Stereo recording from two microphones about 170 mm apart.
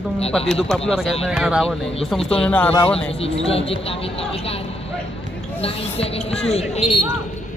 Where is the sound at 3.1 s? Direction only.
35° left (ahead or behind).